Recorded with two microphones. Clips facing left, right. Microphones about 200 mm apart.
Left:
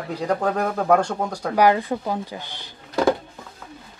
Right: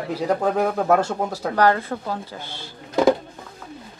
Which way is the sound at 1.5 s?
15° left (ahead or behind).